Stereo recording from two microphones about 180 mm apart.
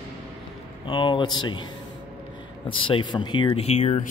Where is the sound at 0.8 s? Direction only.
25° left (ahead or behind).